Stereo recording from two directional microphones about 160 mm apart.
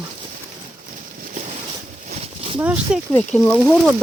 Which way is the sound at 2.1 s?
35° right (ahead or behind).